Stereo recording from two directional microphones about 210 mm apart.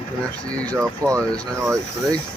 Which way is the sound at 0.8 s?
15° right (ahead or behind).